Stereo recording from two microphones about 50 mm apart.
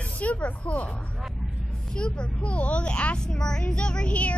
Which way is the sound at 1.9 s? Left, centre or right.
Left.